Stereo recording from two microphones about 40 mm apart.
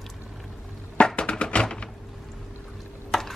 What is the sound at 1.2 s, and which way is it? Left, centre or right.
Music, left.